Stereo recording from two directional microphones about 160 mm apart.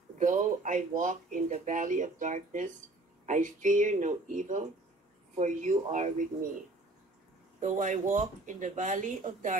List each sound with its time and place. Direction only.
0.2 s speech: 50° right (ahead or behind)
7.6 s speech: 50° right (ahead or behind)